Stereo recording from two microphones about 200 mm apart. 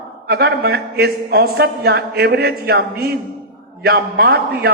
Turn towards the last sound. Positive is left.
turn(degrees=-50)  # may be behind; listen again after turning